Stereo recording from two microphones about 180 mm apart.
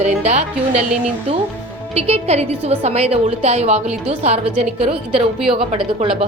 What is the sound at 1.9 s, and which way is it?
A woman's voice, 35° right (ahead or behind).